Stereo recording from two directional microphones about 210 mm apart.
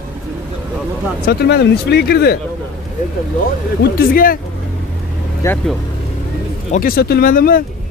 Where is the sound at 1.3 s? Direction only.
50° left (ahead or behind).